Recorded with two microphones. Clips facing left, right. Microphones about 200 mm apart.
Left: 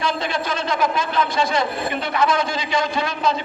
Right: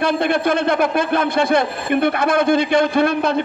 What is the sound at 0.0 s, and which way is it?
A man's voice, 60° right (ahead or behind).